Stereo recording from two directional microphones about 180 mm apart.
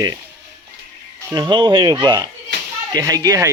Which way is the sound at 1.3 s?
25° right (ahead or behind).